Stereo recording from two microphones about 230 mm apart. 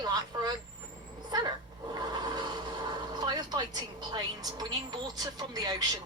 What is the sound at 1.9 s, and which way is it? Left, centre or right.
Speech, centre.